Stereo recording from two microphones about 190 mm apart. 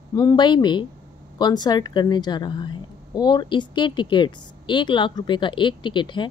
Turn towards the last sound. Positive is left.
turn(degrees=25)  # may be behind; listen again after turning